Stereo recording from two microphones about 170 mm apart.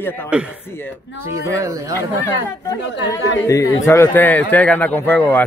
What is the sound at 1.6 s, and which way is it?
Speech, 20° right (ahead or behind).